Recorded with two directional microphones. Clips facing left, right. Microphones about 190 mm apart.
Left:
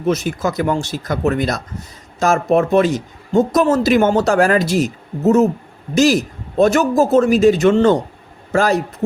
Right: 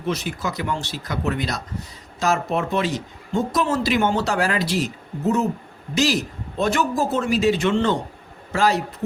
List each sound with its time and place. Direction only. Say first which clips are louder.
0.0 s speech: left 7 dB; 45° left (ahead or behind)